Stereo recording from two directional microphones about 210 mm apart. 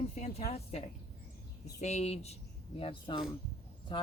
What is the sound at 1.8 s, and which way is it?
Speech, 30° left (ahead or behind).